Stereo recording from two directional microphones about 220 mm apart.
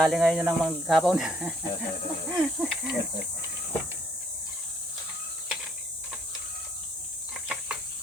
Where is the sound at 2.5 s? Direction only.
Centre (ahead or behind).